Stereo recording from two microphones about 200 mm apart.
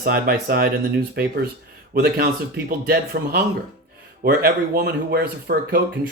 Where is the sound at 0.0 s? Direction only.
50° right (ahead or behind).